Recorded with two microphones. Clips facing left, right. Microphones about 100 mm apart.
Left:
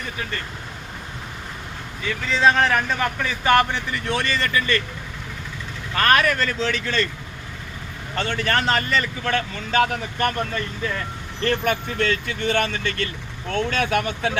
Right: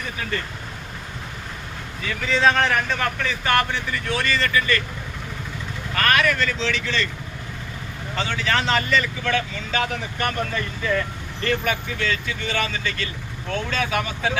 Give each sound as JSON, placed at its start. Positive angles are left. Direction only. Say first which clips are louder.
{"t": 2.2, "sound": "speech", "louder": "left 1 dB", "side_deg": 0}
{"t": 3.0, "sound": "speech", "louder": "left 1 dB", "side_deg": 15}
{"t": 6.0, "sound": "speech", "louder": "left 2 dB", "side_deg": 35}
{"t": 8.1, "sound": "speech", "louder": "left 1 dB", "side_deg": 55}
{"t": 11.4, "sound": "speech", "louder": "left 2 dB", "side_deg": 50}